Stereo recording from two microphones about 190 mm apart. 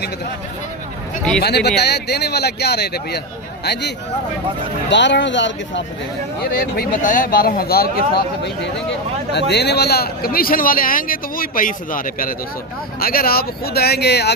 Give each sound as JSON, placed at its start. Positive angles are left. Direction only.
{"t": 1.4, "sound": "speech", "side_deg": 60}
{"t": 6.4, "sound": "a man's voice", "side_deg": 50}
{"t": 9.5, "sound": "a man's voice", "side_deg": 60}